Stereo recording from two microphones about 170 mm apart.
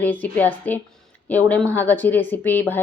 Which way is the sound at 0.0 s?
10° left (ahead or behind).